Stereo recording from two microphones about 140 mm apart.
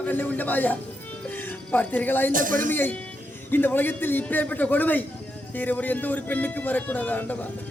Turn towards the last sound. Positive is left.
turn(degrees=10)  # may be behind; listen again after turning